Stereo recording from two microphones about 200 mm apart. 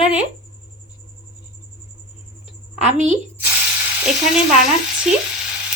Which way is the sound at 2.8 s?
35° right (ahead or behind).